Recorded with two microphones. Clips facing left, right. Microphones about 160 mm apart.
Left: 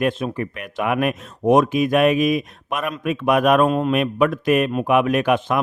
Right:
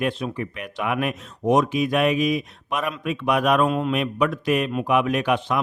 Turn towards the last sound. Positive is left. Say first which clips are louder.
# left 3 dB
turn(degrees=50)  # may be behind; listen again after turning